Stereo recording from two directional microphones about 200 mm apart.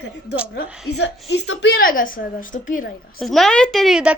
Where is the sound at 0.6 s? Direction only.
65° left (ahead or behind); by 2.9 s 40° left (ahead or behind).